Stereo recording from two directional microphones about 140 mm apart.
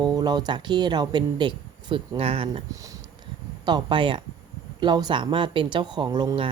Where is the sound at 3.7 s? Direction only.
35° right (ahead or behind).